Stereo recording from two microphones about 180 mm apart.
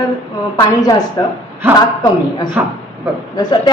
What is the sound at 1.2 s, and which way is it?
Speech, 20° left (ahead or behind).